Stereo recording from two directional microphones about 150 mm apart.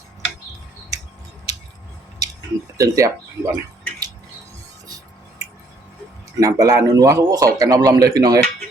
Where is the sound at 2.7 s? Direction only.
20° right (ahead or behind).